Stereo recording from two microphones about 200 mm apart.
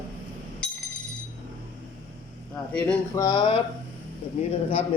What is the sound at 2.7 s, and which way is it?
Speech, 10° left (ahead or behind).